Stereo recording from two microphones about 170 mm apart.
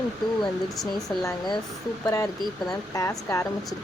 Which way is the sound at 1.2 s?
20° left (ahead or behind).